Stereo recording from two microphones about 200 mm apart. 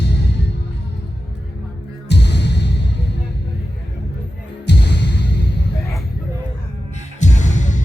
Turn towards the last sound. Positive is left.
turn(degrees=35)  # may be behind; listen again after turning